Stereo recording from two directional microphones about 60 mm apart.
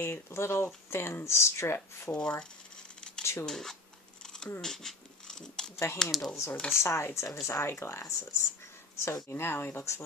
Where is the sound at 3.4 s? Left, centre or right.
Centre.